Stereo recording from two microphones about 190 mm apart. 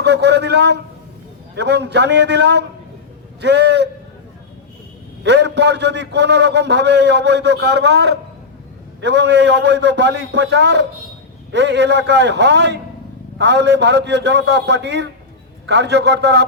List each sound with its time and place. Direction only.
0.0 s a man's voice: 65° right (ahead or behind)
5.2 s a man's voice: 65° right (ahead or behind)